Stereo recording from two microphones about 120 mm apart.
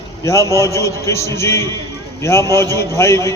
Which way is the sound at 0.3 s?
25° left (ahead or behind).